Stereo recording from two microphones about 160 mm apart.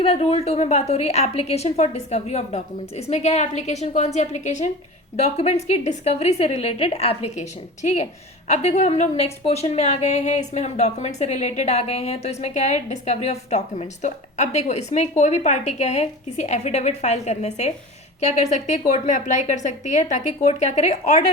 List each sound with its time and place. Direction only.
0.0 s a woman's voice: 40° left (ahead or behind)